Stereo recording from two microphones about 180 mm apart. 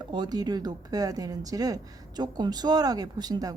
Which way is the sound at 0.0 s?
25° right (ahead or behind).